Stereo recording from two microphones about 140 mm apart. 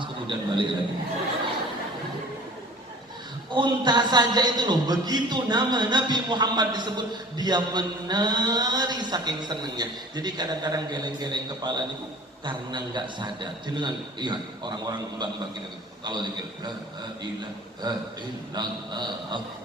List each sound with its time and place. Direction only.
0.0 s a man's voice: 35° right (ahead or behind)
3.5 s a man's voice: 35° right (ahead or behind)
17.8 s a man's voice: 30° right (ahead or behind)